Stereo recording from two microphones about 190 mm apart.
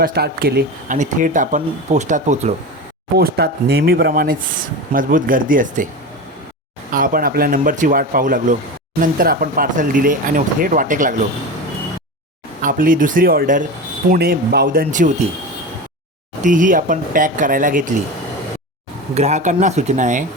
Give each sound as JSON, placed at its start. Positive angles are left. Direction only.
{"t": 0.0, "sound": "speech", "side_deg": -55}
{"t": 3.2, "sound": "speech", "side_deg": -55}
{"t": 6.9, "sound": "speech", "side_deg": -50}
{"t": 12.6, "sound": "speech", "side_deg": -45}
{"t": 16.4, "sound": "speech", "side_deg": -45}
{"t": 19.1, "sound": "speech", "side_deg": -35}